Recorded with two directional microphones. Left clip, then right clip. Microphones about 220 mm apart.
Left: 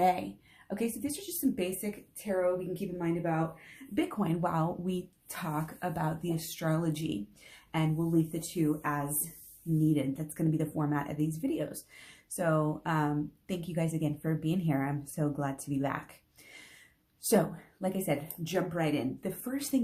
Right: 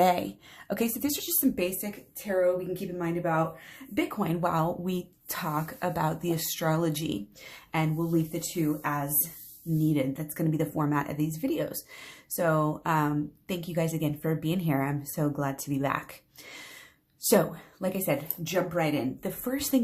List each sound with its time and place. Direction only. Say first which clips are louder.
0.0 s speech: right 4 dB; 30° right (ahead or behind)
1.5 s speech: right 4 dB; 15° right (ahead or behind)
2.2 s speech: right 4 dB; centre (ahead or behind)
17.2 s speech: right 4 dB; 10° right (ahead or behind)